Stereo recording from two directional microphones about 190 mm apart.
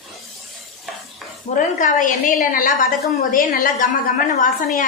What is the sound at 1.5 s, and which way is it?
A woman's voice, 40° left (ahead or behind).